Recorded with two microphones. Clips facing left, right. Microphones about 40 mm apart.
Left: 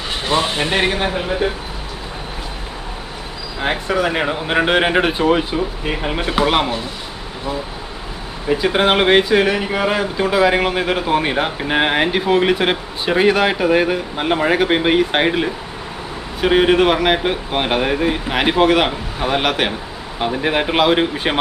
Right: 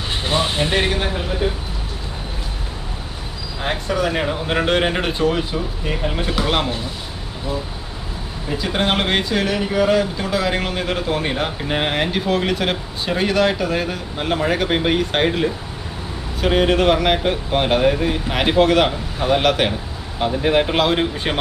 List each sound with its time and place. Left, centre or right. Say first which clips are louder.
0.7 s speech: left 2 dB; centre
3.6 s speech: left 3 dB; centre
8.4 s speech: left 5 dB; centre